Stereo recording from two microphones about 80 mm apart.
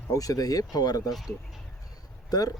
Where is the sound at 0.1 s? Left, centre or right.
Left.